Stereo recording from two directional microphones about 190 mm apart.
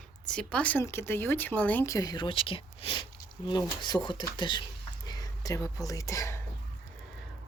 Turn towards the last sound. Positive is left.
turn(degrees=15)  # may be behind; listen again after turning